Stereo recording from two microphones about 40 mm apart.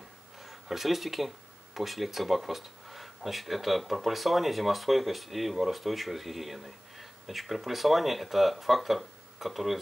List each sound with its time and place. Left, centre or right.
0.4 s speech: centre